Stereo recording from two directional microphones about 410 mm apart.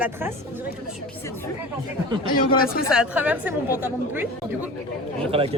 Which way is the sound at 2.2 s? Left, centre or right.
Centre.